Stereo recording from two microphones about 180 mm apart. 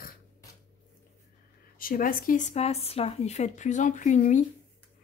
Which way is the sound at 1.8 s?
50° left (ahead or behind).